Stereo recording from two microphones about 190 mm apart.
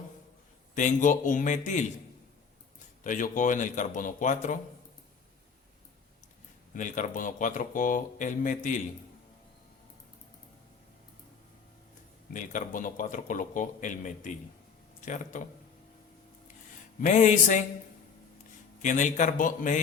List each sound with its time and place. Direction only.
0.8 s speech: 40° left (ahead or behind)
3.0 s speech: 45° left (ahead or behind)
6.7 s speech: 40° left (ahead or behind)
12.3 s speech: 40° left (ahead or behind)
17.0 s speech: 40° left (ahead or behind)
18.8 s speech: 40° left (ahead or behind)